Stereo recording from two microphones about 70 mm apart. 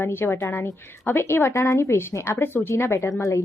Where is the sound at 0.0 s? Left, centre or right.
Left.